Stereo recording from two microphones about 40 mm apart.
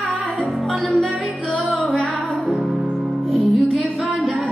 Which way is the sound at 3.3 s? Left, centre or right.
Centre.